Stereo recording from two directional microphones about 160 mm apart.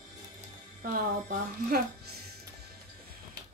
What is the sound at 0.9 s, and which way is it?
Speech, 60° right (ahead or behind).